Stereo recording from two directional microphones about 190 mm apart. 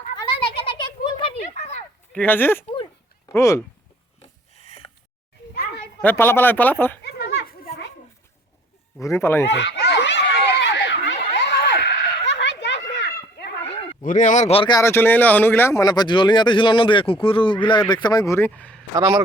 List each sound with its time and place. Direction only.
0.2 s a sound: 30° left (ahead or behind)
2.1 s speech: 10° left (ahead or behind)
4.6 s a sound: 30° left (ahead or behind)
6.0 s speech: 10° left (ahead or behind)
7.0 s children playing: 60° left (ahead or behind)
9.0 s speech: 15° left (ahead or behind)
9.5 s a sound: 65° left (ahead or behind)
14.0 s speech: 45° left (ahead or behind)
14.8 s speech: 10° left (ahead or behind)
18.9 s a man's voice: 20° right (ahead or behind)